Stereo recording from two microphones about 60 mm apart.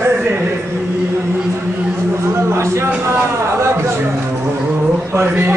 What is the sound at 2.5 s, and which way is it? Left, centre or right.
Music, right.